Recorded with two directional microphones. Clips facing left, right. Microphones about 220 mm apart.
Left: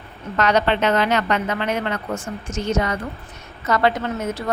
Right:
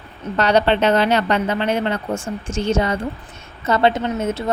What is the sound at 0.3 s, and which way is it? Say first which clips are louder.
A woman's voice: right 3 dB; 30° right (ahead or behind).